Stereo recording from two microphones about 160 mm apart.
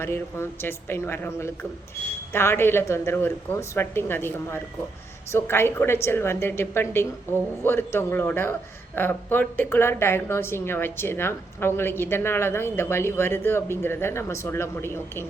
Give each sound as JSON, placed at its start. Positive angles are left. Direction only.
{"t": 0.0, "sound": "speech", "side_deg": 15}